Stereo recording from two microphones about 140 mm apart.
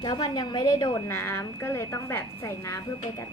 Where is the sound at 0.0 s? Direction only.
30° left (ahead or behind).